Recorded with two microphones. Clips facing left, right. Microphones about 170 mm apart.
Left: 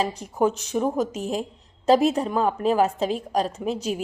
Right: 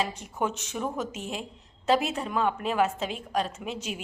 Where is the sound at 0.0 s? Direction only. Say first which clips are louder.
Left 7 dB; 35° left (ahead or behind).